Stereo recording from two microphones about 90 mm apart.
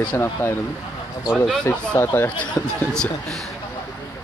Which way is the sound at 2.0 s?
25° left (ahead or behind).